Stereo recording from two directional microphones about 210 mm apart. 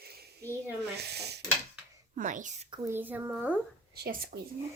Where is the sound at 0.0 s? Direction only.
50° right (ahead or behind).